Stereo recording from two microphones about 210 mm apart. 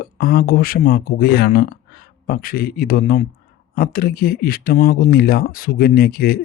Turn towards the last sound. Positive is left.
turn(degrees=45)  # may be behind; listen again after turning